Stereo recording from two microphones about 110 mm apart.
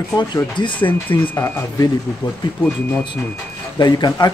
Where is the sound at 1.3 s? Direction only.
25° left (ahead or behind).